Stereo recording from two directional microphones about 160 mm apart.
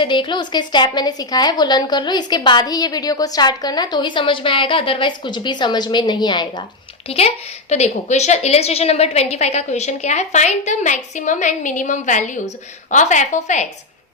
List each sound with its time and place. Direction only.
0.0 s a woman's voice: 30° left (ahead or behind)
7.1 s a woman's voice: 40° left (ahead or behind)